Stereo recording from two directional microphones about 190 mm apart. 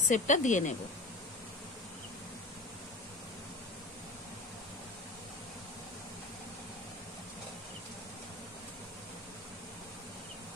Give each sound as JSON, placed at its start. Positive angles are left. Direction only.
{"t": 0.1, "sound": "speech", "side_deg": 40}